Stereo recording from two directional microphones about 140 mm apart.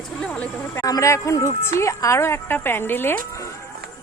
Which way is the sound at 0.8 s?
25° left (ahead or behind).